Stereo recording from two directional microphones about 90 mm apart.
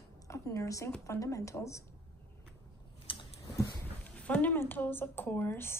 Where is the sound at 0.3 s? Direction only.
35° left (ahead or behind).